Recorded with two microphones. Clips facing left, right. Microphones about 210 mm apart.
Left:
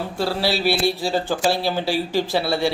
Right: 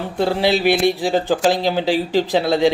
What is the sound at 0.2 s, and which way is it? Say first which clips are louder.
A man's voice: right 5 dB; 20° right (ahead or behind).